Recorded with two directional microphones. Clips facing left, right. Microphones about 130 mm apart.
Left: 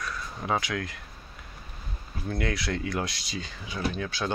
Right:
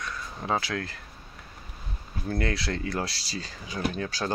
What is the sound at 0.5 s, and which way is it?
Speech, 35° right (ahead or behind).